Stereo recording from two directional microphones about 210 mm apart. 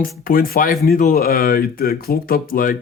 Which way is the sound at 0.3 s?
45° left (ahead or behind).